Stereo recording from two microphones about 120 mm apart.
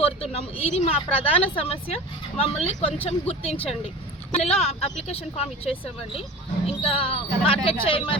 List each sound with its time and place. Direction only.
0.0 s speech: 60° left (ahead or behind)